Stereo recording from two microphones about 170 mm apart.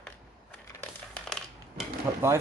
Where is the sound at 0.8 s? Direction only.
5° left (ahead or behind).